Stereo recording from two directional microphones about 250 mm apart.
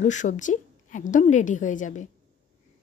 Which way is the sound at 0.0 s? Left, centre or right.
Left.